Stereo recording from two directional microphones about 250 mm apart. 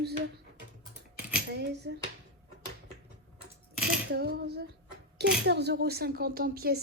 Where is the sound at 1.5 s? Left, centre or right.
Right.